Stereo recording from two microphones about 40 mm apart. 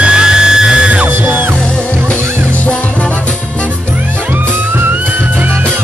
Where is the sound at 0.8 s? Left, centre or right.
Right.